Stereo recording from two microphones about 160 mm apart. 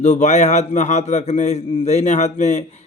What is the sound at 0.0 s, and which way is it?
A man's voice, 45° left (ahead or behind).